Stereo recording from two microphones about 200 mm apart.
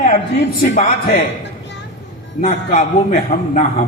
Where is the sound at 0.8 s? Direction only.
35° left (ahead or behind).